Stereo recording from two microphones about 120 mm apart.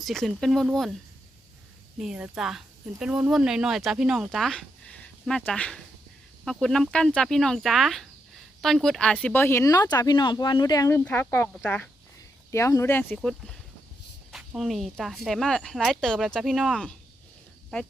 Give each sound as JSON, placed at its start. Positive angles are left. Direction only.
{"t": 0.0, "sound": "speech", "side_deg": 0}
{"t": 2.0, "sound": "speech", "side_deg": -5}
{"t": 14.3, "sound": "speech", "side_deg": -5}